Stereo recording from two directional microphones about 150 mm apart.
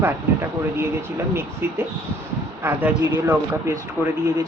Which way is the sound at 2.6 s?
10° right (ahead or behind).